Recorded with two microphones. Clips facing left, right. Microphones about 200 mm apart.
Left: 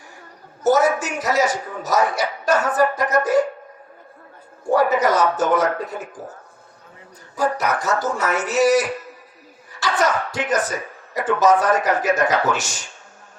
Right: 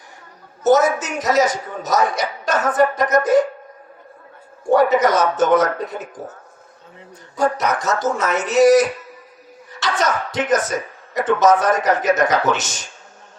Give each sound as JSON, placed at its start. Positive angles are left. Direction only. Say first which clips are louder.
{"t": 0.6, "sound": "speech", "louder": "right 2 dB", "side_deg": -20}
{"t": 4.7, "sound": "speech", "louder": "right 3 dB", "side_deg": -20}
{"t": 7.3, "sound": "speech", "louder": "right 2 dB", "side_deg": -20}